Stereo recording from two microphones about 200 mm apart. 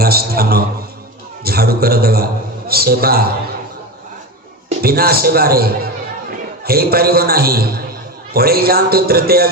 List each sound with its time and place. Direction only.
0.0 s a man's voice: 50° right (ahead or behind)
4.8 s a man's voice: 50° right (ahead or behind)